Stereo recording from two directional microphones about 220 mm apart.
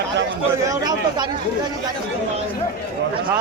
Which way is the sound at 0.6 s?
15° right (ahead or behind).